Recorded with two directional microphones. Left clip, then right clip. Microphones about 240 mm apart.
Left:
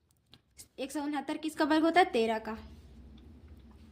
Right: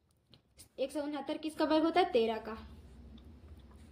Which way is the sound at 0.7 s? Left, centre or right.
Left.